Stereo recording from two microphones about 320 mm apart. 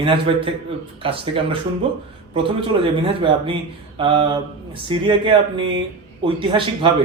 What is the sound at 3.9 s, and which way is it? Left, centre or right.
Speech, centre.